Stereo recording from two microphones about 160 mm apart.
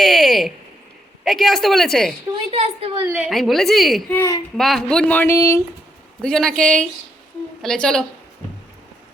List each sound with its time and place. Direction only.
0.0 s speech: centre (ahead or behind)
2.5 s a woman's voice: 40° right (ahead or behind)
3.1 s speech: 5° right (ahead or behind)
4.1 s speech: 15° left (ahead or behind)
4.5 s speech: centre (ahead or behind); by 5.6 s 15° left (ahead or behind)
6.2 s speech: 5° left (ahead or behind)